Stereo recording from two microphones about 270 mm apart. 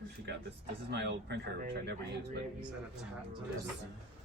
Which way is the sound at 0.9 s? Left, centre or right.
Right.